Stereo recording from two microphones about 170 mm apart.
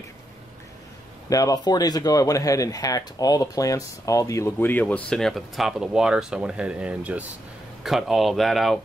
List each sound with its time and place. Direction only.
1.3 s speech: 20° left (ahead or behind); by 8.8 s centre (ahead or behind)